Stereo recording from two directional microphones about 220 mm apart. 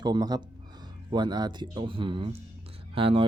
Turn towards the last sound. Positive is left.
turn(degrees=-25)  # may be behind; listen again after turning